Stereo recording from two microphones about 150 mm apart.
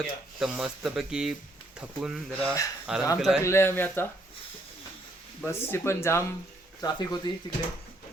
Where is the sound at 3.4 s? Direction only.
15° left (ahead or behind).